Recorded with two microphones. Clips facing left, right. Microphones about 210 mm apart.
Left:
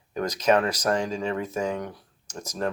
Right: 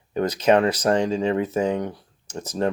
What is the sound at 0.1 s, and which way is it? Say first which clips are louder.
Speech: right 4 dB; 30° right (ahead or behind).